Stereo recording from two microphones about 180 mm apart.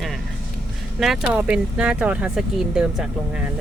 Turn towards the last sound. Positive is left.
turn(degrees=-5)  # may be behind; listen again after turning